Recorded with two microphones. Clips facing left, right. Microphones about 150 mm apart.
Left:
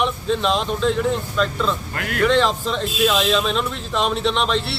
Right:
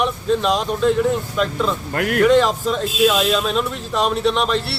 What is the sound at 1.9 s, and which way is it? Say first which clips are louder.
Speech: right 7 dB; 50° right (ahead or behind).